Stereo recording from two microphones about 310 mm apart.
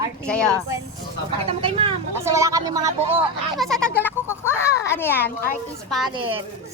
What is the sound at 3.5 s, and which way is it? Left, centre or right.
Children playing, centre.